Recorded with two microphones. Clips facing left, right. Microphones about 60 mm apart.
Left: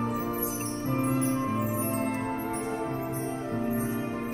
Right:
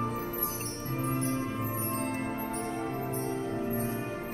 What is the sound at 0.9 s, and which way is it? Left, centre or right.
Music, left.